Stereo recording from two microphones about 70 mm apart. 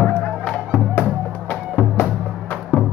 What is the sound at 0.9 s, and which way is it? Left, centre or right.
Music, left.